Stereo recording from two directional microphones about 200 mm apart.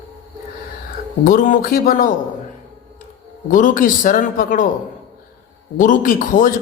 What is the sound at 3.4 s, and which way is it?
Speech, 40° left (ahead or behind).